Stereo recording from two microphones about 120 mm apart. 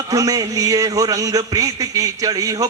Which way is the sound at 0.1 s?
30° right (ahead or behind).